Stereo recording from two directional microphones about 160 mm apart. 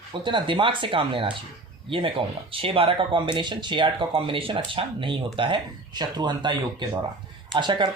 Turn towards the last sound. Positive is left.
turn(degrees=-30)  # may be behind; listen again after turning